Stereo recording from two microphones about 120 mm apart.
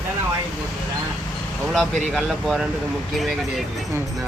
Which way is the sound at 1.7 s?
Centre (ahead or behind).